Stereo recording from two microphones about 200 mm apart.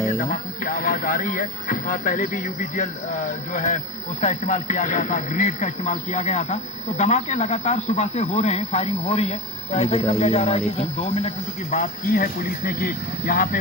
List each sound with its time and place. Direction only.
0.2 s speech: 45° left (ahead or behind)